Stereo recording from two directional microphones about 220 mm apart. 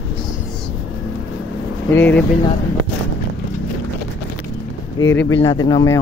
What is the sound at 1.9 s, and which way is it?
Speech, 10° left (ahead or behind).